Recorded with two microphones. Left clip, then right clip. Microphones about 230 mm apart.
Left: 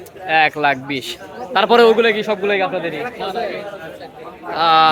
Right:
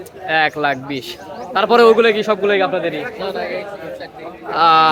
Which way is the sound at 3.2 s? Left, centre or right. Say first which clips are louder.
Left 1 dB; right.